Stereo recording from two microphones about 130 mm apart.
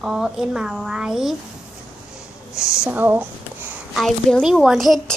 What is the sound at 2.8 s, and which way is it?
Speech, 15° right (ahead or behind).